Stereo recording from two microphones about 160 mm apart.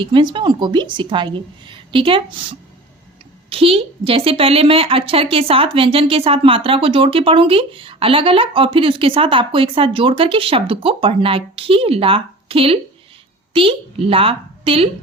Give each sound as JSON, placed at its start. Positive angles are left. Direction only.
{"t": 0.0, "sound": "a woman's voice", "side_deg": -30}